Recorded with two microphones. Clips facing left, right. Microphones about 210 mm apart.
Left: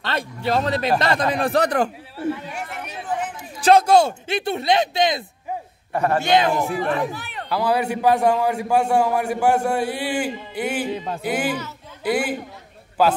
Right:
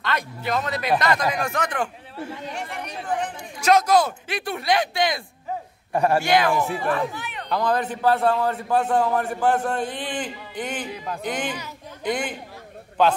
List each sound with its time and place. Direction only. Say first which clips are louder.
0.0 s a man's voice: left 3 dB; 30° left (ahead or behind)
2.5 s chatter: even; 5° left (ahead or behind)
3.6 s a man's voice: left 4 dB; 30° left (ahead or behind)
5.9 s a man's voice: even; 10° right (ahead or behind)
6.2 s a man's voice: left 2 dB; 25° left (ahead or behind)
7.2 s a sound: even; 40° left (ahead or behind)
7.4 s a man's voice: left 2 dB; 5° left (ahead or behind)
10.9 s a man's voice: left 5 dB; 25° left (ahead or behind)
11.2 s a man's voice: left 5 dB; 10° left (ahead or behind)